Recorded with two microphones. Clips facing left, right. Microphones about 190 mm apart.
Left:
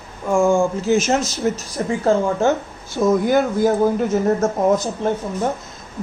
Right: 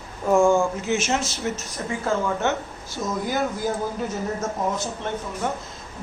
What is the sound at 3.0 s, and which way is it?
Speech, 55° left (ahead or behind).